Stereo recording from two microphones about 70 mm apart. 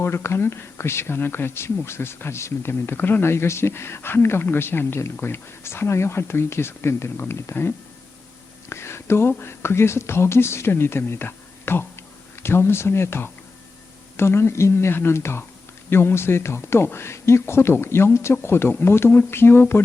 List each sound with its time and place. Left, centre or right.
0.0 s speech: left
8.7 s speech: left